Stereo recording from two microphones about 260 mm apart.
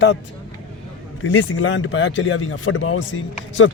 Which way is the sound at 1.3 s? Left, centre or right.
Left.